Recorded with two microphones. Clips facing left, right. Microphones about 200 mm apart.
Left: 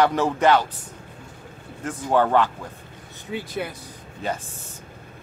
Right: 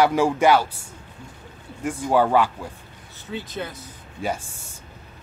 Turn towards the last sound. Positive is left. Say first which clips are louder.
# right 1 dB
turn(degrees=-10)  # may be behind; listen again after turning